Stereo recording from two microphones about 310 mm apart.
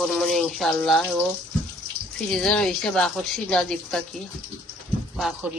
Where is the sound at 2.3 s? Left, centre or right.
Centre.